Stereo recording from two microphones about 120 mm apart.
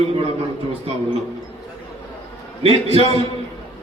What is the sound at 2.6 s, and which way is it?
Speech, 55° right (ahead or behind).